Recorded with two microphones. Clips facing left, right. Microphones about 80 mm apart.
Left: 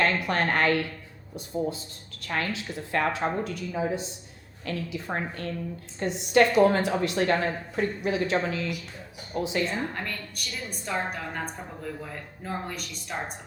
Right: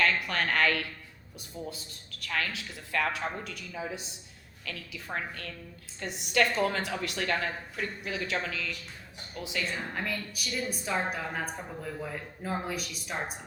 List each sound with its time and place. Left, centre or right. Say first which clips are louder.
0.0 s speech: left 3 dB; left
9.9 s a woman's voice: even; centre